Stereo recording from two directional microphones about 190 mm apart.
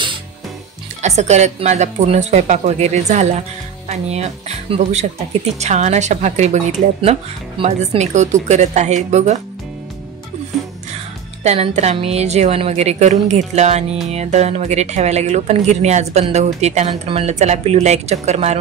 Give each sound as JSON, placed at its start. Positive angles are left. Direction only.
{"t": 1.0, "sound": "speech", "side_deg": -35}
{"t": 11.4, "sound": "speech", "side_deg": -35}